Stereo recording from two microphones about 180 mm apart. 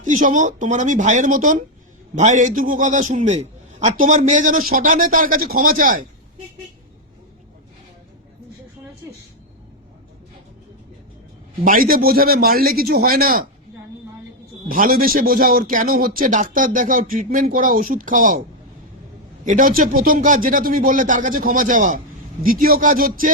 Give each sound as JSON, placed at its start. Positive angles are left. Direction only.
{"t": 0.0, "sound": "a man's voice", "side_deg": -45}
{"t": 11.6, "sound": "a man's voice", "side_deg": -50}
{"t": 14.7, "sound": "a man's voice", "side_deg": -50}
{"t": 19.5, "sound": "a man's voice", "side_deg": -50}